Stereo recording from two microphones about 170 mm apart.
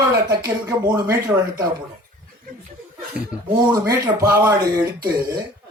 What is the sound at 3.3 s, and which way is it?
Speech, 5° right (ahead or behind).